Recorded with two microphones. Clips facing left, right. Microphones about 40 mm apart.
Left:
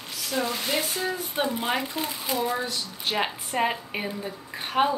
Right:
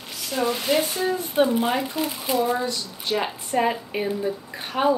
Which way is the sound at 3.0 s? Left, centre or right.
Left.